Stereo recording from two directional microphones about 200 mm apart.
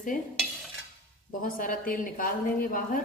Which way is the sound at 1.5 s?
45° left (ahead or behind).